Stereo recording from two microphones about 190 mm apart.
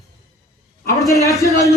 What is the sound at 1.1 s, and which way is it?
Speech, 15° left (ahead or behind).